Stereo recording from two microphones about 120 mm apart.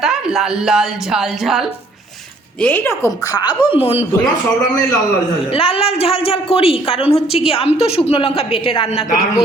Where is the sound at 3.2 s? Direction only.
35° left (ahead or behind); by 4.0 s 50° left (ahead or behind).